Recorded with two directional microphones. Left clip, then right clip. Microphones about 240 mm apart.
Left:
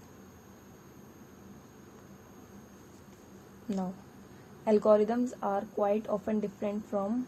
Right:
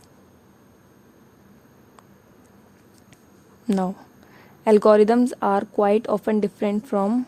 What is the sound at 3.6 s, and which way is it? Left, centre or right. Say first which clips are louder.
A woman's voice: right 13 dB; right.